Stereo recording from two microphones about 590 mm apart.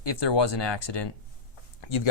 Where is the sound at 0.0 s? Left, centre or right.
Left.